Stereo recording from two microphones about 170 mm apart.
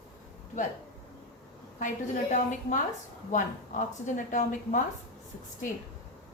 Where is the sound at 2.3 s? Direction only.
45° left (ahead or behind).